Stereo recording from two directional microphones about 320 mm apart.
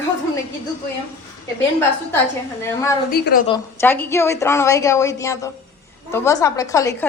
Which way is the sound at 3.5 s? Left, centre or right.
Centre.